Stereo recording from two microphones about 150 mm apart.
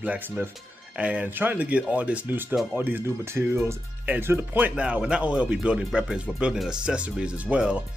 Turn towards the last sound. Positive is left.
turn(degrees=-5)  # may be behind; listen again after turning